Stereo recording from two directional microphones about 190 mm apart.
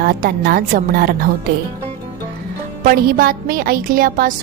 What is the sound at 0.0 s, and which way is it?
A woman's voice, 50° right (ahead or behind).